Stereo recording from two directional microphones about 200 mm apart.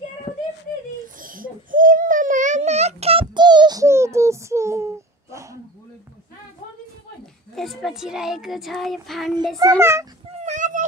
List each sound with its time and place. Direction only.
1.1 s babbling: 45° right (ahead or behind); by 5.6 s 15° right (ahead or behind)
7.5 s speech: centre (ahead or behind)
9.6 s a child's voice: 15° right (ahead or behind)
10.4 s a sound: 40° right (ahead or behind)